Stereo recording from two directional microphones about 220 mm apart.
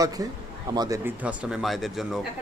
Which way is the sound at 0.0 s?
15° right (ahead or behind).